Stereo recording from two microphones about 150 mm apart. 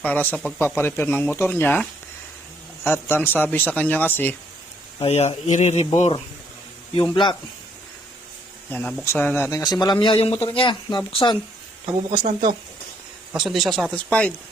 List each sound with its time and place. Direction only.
0.0 s speech: 10° left (ahead or behind)
4.9 s speech: 45° left (ahead or behind)
6.9 s speech: 35° left (ahead or behind)
8.7 s speech: 5° left (ahead or behind); by 11.3 s 30° left (ahead or behind)
13.3 s speech: centre (ahead or behind)